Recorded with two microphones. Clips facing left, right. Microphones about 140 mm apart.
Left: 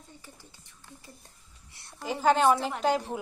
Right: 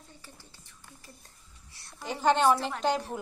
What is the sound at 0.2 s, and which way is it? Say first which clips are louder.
A woman's voice: left 1 dB; 20° left (ahead or behind).